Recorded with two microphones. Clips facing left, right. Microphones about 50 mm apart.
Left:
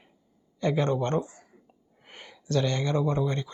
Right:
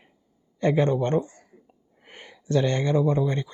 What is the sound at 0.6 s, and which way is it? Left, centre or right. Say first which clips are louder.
Speech: right 4 dB; right.